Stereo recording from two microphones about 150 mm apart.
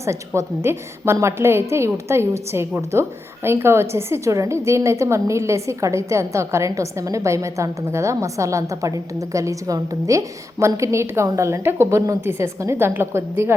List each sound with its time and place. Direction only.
0.0 s a woman's voice: 20° right (ahead or behind)